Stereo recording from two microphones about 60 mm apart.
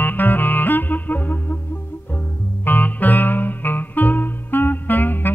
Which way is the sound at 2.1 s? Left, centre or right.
Left.